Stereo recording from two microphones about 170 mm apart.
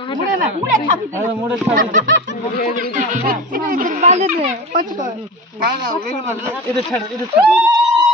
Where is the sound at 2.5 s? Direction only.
70° left (ahead or behind).